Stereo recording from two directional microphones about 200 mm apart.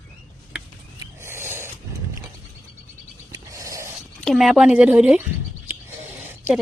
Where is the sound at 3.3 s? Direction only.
15° right (ahead or behind).